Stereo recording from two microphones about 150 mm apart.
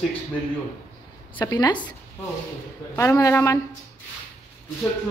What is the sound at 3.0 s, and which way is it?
Speech, 20° left (ahead or behind).